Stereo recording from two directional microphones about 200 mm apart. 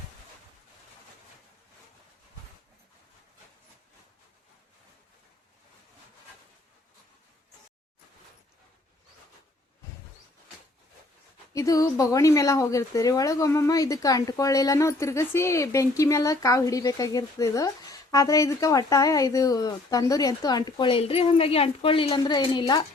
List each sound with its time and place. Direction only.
11.5 s speech: 15° left (ahead or behind)